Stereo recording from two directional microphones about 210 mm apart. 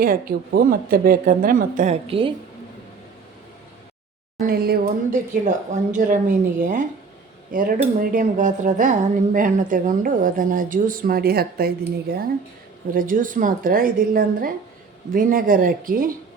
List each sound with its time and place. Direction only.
0.0 s speech: 45° right (ahead or behind); by 2.3 s 25° right (ahead or behind)
4.4 s speech: 45° right (ahead or behind)